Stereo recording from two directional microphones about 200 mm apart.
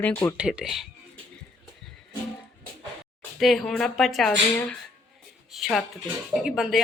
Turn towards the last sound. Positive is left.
turn(degrees=0)  # may be behind; listen again after turning